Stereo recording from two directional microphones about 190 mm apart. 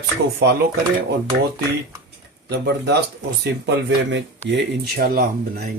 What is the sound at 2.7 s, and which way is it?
Speech, 60° right (ahead or behind).